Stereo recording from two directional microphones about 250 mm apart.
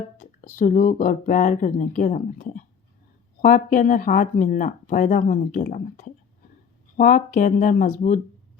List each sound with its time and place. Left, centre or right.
0.2 s speech: left